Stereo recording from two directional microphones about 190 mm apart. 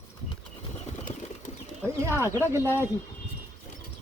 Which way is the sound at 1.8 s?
10° right (ahead or behind).